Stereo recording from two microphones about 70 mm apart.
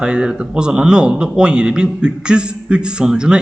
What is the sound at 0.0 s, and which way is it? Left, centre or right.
A man's voice, centre.